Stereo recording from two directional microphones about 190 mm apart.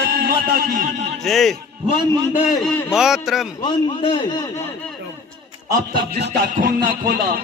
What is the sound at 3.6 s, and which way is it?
Speech, 25° left (ahead or behind).